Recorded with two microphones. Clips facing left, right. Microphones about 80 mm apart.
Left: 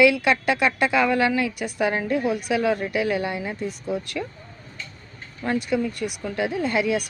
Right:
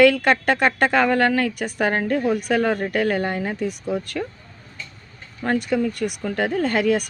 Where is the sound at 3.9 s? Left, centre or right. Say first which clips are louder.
Even; right.